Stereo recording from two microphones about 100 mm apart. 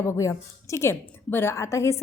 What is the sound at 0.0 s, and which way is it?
A woman's voice, 30° left (ahead or behind).